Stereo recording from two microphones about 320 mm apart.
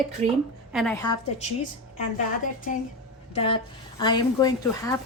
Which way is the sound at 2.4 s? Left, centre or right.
Left.